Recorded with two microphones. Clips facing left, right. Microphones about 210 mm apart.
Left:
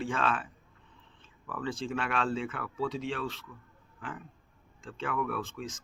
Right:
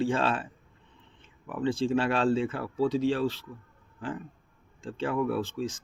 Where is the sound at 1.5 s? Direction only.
25° right (ahead or behind).